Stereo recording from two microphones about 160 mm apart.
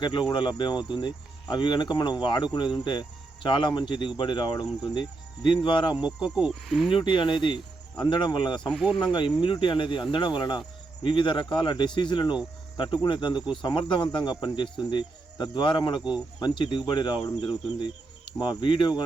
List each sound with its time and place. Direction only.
0.0 s speech: 30° left (ahead or behind)
6.0 s speech: 5° right (ahead or behind)
6.8 s speech: 30° left (ahead or behind)
8.7 s speech: centre (ahead or behind)
9.1 s speech: 30° left (ahead or behind)
16.0 s speech: 5° right (ahead or behind)
16.4 s speech: 30° left (ahead or behind)